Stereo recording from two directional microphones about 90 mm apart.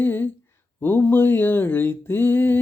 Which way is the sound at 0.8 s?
25° left (ahead or behind).